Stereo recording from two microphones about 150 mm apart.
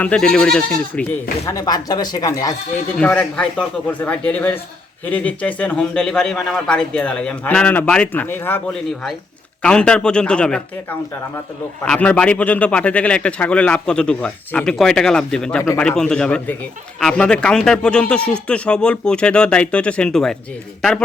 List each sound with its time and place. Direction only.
0.0 s a man's voice: 5° left (ahead or behind)
1.5 s speech: 25° left (ahead or behind)
3.0 s a man's voice: 10° left (ahead or behind)